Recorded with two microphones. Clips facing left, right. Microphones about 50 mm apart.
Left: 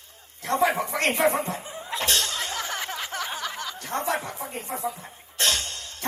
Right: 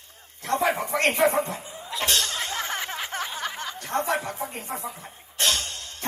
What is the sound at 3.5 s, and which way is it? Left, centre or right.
Chuckle, right.